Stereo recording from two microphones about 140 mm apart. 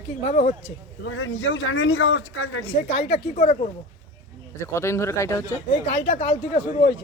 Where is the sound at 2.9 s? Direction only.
55° left (ahead or behind).